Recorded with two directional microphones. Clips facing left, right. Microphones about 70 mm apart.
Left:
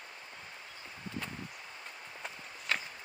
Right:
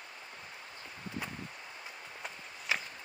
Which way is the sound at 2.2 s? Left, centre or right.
Centre.